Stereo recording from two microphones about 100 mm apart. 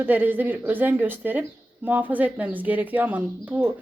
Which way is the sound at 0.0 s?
20° right (ahead or behind).